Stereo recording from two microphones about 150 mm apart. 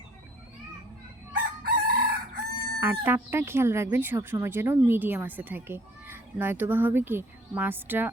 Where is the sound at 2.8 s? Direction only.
15° right (ahead or behind).